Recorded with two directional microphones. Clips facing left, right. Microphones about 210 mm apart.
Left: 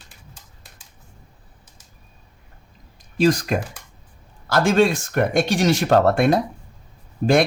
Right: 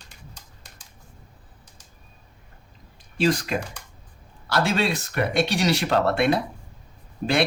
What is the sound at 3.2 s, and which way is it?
Speech, 45° left (ahead or behind).